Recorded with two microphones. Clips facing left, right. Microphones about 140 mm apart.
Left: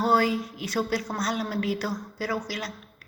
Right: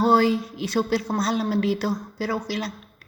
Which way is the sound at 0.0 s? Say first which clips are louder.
Right 4 dB; 25° right (ahead or behind).